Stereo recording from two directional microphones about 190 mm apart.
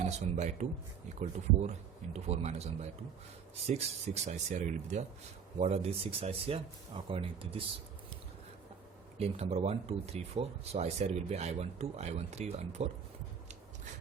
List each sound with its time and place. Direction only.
0.0 s speech: 35° right (ahead or behind)
3.7 s speech: 35° right (ahead or behind)
9.1 s speech: 35° right (ahead or behind)